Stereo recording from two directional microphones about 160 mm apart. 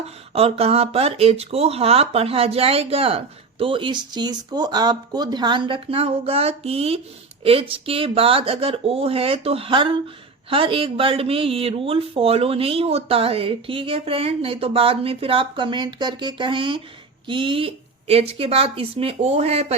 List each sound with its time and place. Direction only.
0.0 s speech: 40° right (ahead or behind)